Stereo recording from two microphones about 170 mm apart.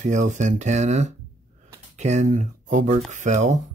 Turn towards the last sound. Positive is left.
turn(degrees=-45)  # may be behind; listen again after turning